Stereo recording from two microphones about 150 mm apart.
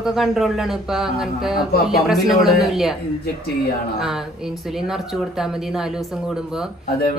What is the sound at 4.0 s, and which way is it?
Speech, 5° right (ahead or behind).